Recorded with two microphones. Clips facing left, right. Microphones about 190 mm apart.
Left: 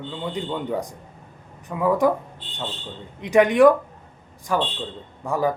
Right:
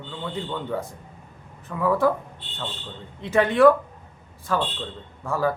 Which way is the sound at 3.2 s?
15° left (ahead or behind).